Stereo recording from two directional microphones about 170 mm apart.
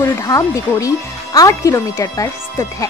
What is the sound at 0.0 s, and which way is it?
Speech, 20° left (ahead or behind).